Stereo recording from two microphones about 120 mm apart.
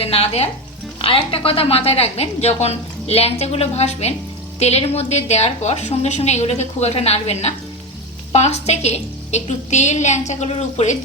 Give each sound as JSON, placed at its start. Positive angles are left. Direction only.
{"t": 0.0, "sound": "a woman's voice", "side_deg": 55}